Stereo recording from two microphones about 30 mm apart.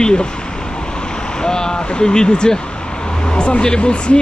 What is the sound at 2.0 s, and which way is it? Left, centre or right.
Speech, left.